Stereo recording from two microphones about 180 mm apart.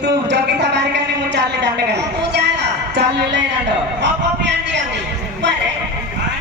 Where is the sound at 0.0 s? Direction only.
70° right (ahead or behind).